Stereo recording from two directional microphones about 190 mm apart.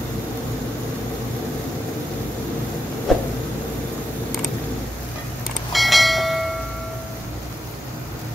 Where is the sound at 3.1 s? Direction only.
Centre (ahead or behind).